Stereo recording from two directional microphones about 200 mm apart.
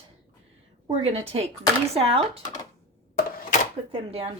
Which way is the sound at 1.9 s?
30° right (ahead or behind).